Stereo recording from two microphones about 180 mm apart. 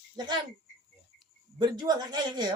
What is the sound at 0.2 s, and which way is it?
Speech, 20° right (ahead or behind).